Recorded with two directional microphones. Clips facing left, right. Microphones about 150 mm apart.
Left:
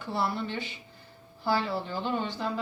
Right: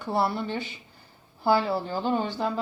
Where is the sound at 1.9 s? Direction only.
40° right (ahead or behind).